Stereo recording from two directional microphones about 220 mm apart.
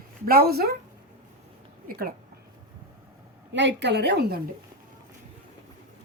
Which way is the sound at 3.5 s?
50° right (ahead or behind).